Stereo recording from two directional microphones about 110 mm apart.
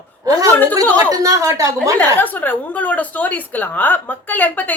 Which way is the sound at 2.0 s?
15° left (ahead or behind).